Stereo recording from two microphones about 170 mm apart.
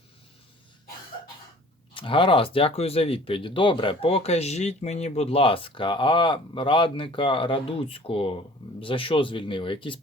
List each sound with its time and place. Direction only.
1.9 s speech: 30° left (ahead or behind)